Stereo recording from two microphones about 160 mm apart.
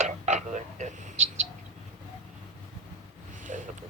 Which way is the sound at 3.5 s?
50° right (ahead or behind).